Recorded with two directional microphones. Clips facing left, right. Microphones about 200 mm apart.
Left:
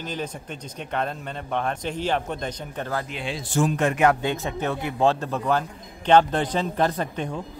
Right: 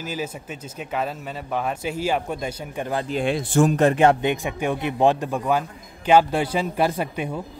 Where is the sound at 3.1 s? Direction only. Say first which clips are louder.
Right 7 dB; 55° right (ahead or behind); by 4.1 s 30° right (ahead or behind).